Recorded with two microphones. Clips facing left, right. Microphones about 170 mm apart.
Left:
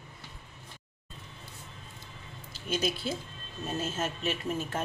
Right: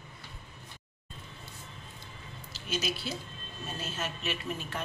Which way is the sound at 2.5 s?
50° left (ahead or behind).